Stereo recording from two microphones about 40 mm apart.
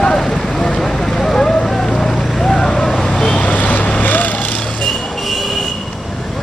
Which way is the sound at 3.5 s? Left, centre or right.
Left.